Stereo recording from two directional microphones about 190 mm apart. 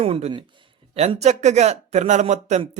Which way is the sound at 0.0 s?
30° right (ahead or behind).